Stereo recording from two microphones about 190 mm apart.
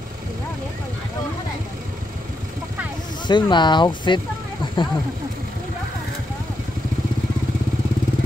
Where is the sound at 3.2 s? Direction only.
25° left (ahead or behind).